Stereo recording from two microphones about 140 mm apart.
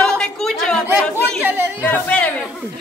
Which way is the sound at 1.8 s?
10° left (ahead or behind).